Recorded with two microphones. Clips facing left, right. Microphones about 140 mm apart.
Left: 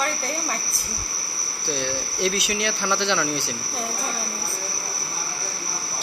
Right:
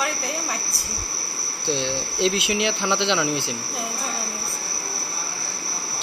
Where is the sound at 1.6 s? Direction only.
20° right (ahead or behind).